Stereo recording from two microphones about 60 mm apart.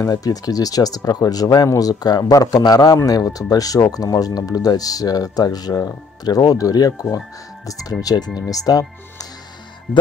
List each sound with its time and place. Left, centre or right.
0.0 s speech: left
7.6 s speech: left